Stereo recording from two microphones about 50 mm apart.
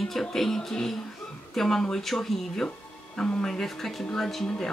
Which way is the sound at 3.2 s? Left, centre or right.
Centre.